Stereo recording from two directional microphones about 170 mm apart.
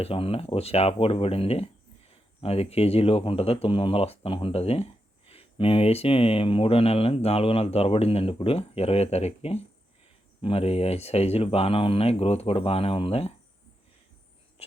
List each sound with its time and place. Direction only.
0.0 s speech: 35° left (ahead or behind)